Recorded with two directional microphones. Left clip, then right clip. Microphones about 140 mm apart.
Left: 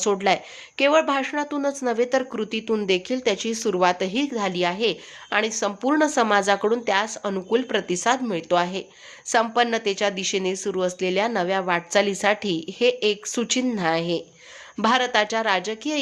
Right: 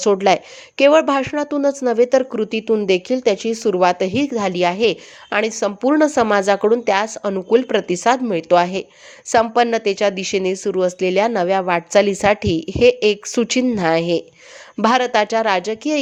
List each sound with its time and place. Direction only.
0.0 s a woman's voice: 35° right (ahead or behind)